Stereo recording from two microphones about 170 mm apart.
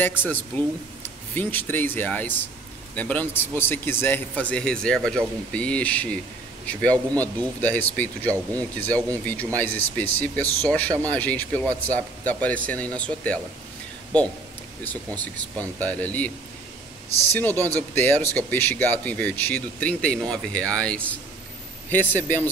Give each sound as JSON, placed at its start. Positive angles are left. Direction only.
{"t": 0.0, "sound": "speech", "side_deg": 10}
{"t": 15.1, "sound": "speech", "side_deg": 10}
{"t": 17.3, "sound": "speech", "side_deg": 10}